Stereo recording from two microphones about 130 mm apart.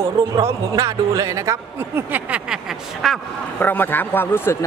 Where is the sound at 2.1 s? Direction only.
10° right (ahead or behind).